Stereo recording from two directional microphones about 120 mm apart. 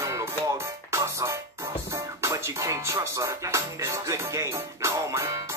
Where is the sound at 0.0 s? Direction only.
25° right (ahead or behind).